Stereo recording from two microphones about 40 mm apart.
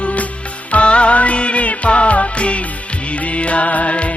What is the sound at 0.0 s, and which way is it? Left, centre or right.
Music, left.